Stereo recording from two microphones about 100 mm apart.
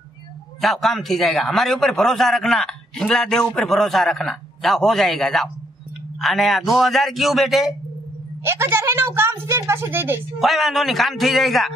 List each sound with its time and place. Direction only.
0.6 s a man's voice: centre (ahead or behind)
8.5 s a woman's voice: 25° right (ahead or behind)
10.4 s a man's voice: centre (ahead or behind)